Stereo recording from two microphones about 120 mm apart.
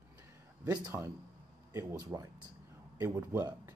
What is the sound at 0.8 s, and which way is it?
Speech, 25° right (ahead or behind).